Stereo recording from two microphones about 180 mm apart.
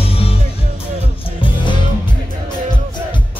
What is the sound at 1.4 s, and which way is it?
Music, 25° left (ahead or behind).